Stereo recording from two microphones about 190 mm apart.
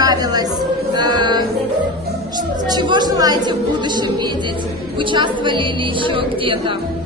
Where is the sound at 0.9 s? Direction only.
25° right (ahead or behind).